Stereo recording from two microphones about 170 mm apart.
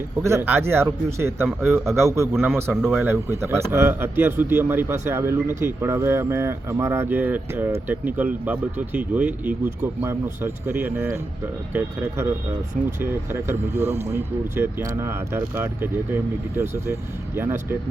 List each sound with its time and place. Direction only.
0.2 s a man's voice: 15° right (ahead or behind)